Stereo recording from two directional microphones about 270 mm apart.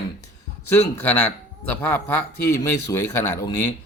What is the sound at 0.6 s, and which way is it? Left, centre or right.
Speech, left.